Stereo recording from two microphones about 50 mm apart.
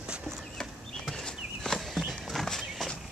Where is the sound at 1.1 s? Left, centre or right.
Centre.